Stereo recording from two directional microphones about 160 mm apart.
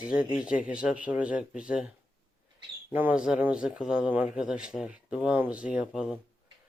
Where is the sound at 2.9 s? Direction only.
10° right (ahead or behind).